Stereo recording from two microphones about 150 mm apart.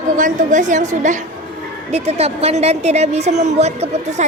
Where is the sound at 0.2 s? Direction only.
60° right (ahead or behind).